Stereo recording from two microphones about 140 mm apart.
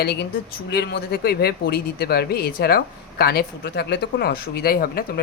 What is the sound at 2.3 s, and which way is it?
Speech, 90° left.